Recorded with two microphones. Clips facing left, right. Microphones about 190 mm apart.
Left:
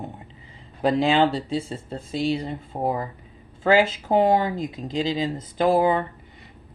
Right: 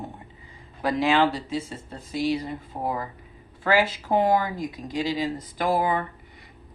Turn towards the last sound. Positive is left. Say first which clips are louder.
# left 5 dB
turn(degrees=25)  # may be behind; listen again after turning